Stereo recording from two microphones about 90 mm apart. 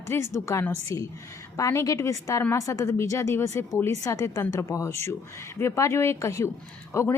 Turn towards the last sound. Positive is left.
turn(degrees=30)  # may be behind; listen again after turning